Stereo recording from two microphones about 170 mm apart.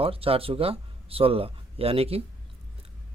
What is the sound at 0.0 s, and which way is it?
Speech, 35° right (ahead or behind).